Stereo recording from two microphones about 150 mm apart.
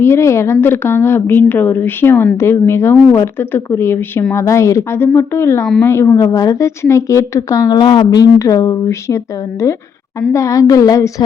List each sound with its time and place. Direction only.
0.0 s a woman's voice: 15° left (ahead or behind)